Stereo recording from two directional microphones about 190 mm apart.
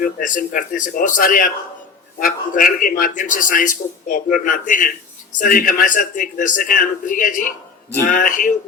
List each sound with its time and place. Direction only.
0.0 s a man's voice: 45° left (ahead or behind)